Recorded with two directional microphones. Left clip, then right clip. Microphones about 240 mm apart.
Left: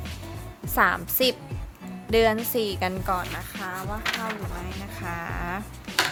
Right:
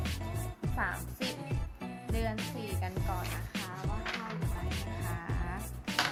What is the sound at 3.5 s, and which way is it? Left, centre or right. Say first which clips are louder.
Music: left 5 dB; centre.